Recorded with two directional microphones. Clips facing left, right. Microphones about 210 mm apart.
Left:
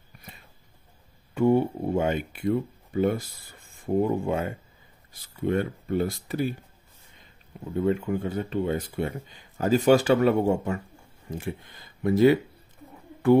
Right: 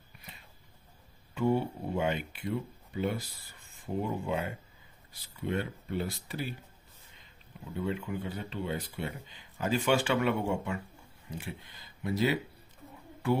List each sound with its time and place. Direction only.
1.3 s speech: 50° left (ahead or behind)
7.8 s speech: 50° left (ahead or behind)